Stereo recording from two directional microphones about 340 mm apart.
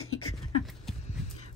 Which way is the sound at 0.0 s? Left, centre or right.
Left.